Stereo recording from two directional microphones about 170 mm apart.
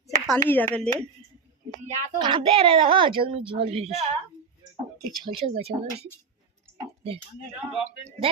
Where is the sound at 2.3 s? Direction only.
30° right (ahead or behind).